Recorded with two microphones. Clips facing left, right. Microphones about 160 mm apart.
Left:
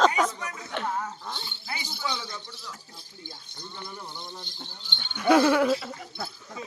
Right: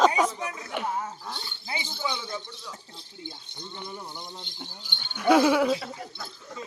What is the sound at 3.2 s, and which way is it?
Keys jangling, 20° right (ahead or behind).